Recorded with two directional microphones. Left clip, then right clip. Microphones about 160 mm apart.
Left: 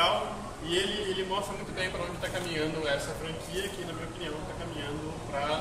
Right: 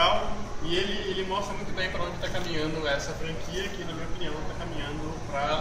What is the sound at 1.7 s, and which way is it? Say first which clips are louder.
A man's voice: right 3 dB; 15° left (ahead or behind).